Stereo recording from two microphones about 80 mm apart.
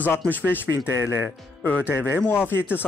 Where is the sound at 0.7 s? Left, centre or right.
Right.